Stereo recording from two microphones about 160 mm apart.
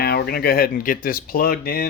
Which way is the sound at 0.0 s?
80° left.